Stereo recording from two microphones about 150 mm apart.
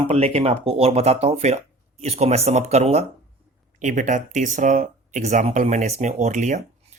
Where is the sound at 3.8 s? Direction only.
55° right (ahead or behind).